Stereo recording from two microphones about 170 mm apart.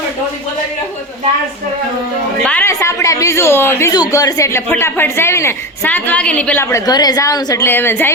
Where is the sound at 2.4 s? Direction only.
10° left (ahead or behind).